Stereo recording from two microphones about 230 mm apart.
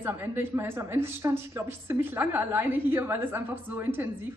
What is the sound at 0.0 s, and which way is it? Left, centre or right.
A woman's voice, centre.